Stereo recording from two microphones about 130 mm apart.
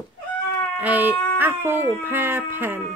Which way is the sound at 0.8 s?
15° right (ahead or behind).